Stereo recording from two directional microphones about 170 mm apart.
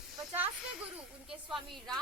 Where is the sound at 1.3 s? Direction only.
Centre (ahead or behind).